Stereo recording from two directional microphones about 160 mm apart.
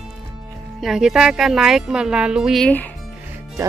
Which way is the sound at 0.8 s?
5° right (ahead or behind).